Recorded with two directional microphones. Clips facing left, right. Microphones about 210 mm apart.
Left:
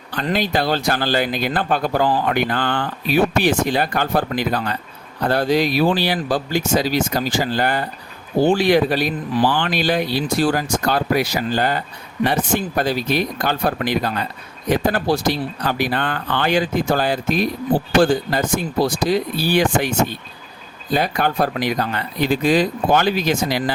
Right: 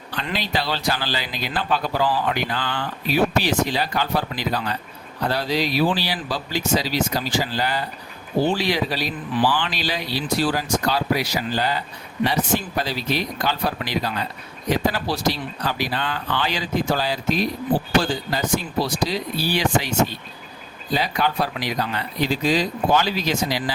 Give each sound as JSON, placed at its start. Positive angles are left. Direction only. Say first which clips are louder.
{"t": 0.1, "sound": "speech", "louder": "left 6 dB", "side_deg": 45}
{"t": 20.9, "sound": "speech", "louder": "left 3 dB", "side_deg": 55}